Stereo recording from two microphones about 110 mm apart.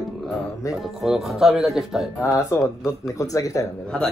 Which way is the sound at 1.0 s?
Centre (ahead or behind).